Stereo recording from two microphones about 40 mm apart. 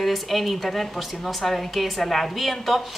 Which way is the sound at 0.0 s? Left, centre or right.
Centre.